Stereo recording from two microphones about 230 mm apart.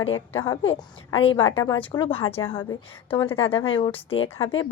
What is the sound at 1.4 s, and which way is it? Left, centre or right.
A woman's voice, left.